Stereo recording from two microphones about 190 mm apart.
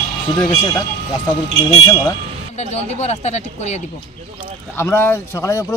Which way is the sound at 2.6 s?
35° left (ahead or behind).